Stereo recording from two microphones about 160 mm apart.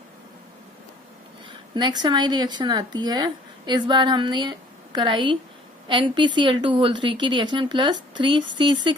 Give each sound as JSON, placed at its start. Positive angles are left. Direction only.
{"t": 1.7, "sound": "speech", "side_deg": -25}